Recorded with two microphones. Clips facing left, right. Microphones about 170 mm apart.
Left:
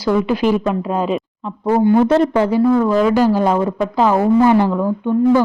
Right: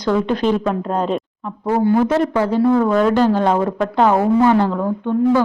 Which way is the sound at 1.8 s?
25° left (ahead or behind).